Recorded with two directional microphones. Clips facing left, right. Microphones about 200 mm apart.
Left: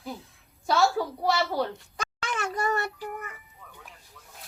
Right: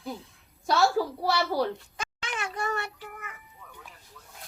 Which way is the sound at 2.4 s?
40° left (ahead or behind).